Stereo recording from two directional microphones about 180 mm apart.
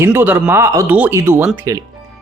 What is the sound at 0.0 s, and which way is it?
A man's voice, 10° right (ahead or behind).